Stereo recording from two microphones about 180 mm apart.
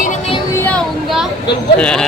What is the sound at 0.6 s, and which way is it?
Speech, 5° left (ahead or behind).